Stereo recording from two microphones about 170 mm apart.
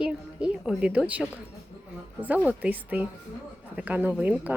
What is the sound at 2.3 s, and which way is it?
A woman's voice, 10° right (ahead or behind).